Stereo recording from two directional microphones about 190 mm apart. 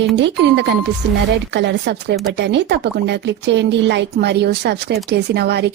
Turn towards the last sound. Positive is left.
turn(degrees=-60)  # may be behind; listen again after turning